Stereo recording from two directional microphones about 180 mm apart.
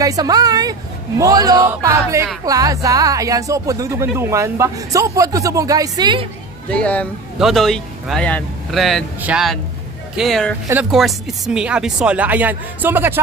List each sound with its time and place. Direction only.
0.0 s speech: 20° right (ahead or behind)
6.7 s speech: 5° left (ahead or behind); by 13.2 s 10° right (ahead or behind)